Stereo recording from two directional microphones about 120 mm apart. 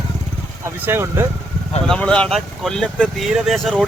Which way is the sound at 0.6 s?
20° right (ahead or behind).